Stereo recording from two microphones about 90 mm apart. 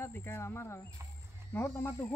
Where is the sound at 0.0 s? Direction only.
25° left (ahead or behind).